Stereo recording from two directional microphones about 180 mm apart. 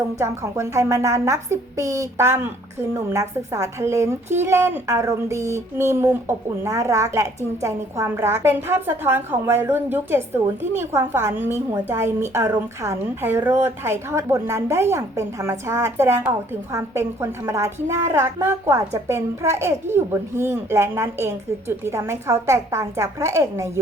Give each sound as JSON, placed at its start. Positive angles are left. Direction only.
{"t": 0.2, "sound": "a woman's voice", "side_deg": -15}